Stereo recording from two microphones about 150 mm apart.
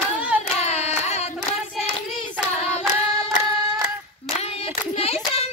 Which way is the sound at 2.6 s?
45° left (ahead or behind).